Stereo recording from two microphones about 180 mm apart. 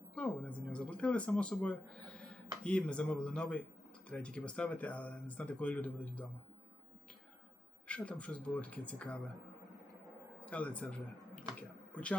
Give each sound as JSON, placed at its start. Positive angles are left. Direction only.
{"t": 0.1, "sound": "speech", "side_deg": 5}
{"t": 7.9, "sound": "speech", "side_deg": 5}
{"t": 10.4, "sound": "speech", "side_deg": 5}
{"t": 11.9, "sound": "a sound", "side_deg": 5}